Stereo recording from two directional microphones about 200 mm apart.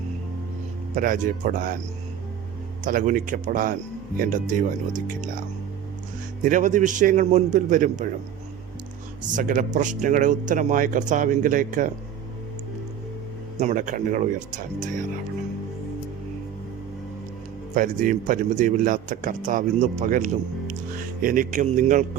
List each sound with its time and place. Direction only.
0.9 s a man's voice: 40° right (ahead or behind)
2.8 s a man's voice: 40° right (ahead or behind)
6.4 s a man's voice: 40° right (ahead or behind)
9.2 s a man's voice: 40° right (ahead or behind)
13.6 s a man's voice: 40° right (ahead or behind)
17.7 s a man's voice: 40° right (ahead or behind)